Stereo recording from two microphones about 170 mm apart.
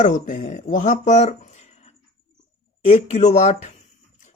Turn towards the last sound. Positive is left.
turn(degrees=40)  # may be behind; listen again after turning